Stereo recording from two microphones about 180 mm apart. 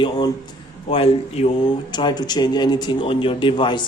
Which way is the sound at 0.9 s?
30° left (ahead or behind).